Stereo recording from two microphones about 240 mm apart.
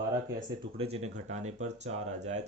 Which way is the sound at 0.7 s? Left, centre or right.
Right.